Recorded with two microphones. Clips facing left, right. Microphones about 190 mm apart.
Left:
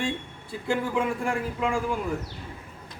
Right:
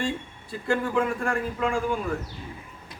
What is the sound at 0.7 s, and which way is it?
A man's voice, 15° left (ahead or behind).